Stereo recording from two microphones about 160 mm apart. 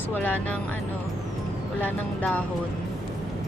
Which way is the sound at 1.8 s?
10° left (ahead or behind).